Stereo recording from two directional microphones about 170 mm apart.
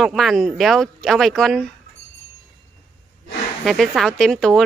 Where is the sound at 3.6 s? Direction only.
Centre (ahead or behind).